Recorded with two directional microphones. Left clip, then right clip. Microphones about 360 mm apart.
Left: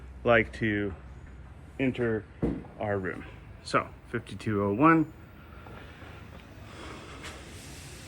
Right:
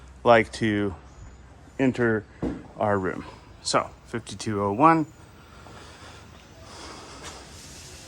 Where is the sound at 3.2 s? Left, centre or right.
Centre.